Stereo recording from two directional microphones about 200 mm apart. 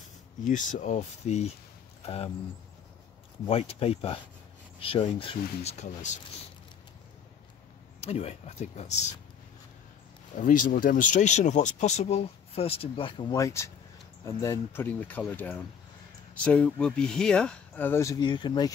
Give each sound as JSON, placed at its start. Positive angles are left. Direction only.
{"t": 0.5, "sound": "speech", "side_deg": 40}
{"t": 3.4, "sound": "speech", "side_deg": 30}
{"t": 8.0, "sound": "speech", "side_deg": 30}
{"t": 10.3, "sound": "speech", "side_deg": 40}